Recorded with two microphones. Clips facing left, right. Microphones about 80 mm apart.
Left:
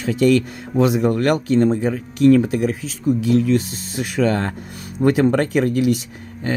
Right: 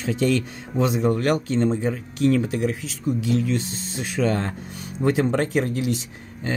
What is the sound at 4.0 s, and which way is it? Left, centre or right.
Speech, left.